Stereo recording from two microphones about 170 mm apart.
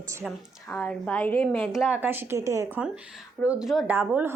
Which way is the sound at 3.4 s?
Centre (ahead or behind).